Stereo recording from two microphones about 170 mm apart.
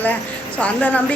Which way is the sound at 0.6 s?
10° left (ahead or behind).